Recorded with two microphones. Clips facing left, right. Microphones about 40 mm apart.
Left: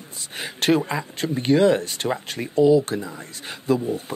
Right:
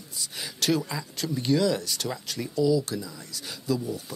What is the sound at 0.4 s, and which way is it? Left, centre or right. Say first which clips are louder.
Speech: left 6 dB; left.